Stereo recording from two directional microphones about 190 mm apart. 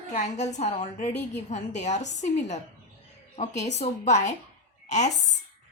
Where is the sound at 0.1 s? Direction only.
35° left (ahead or behind).